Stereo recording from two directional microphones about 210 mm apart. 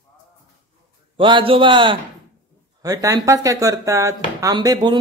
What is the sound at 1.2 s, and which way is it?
A man's voice, 25° right (ahead or behind).